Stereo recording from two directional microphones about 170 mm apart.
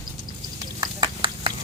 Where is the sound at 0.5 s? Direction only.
25° right (ahead or behind).